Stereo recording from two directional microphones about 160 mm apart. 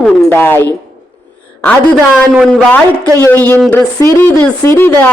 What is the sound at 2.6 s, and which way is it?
Speech, 10° left (ahead or behind).